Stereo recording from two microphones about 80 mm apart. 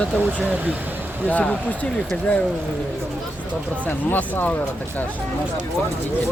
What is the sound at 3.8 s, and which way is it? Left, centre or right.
Speech, left.